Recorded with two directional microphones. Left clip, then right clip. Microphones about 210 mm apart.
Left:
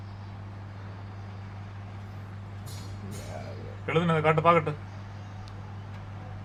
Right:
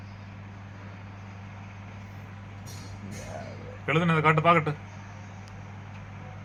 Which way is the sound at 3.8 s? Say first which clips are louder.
Right 1 dB; 25° right (ahead or behind).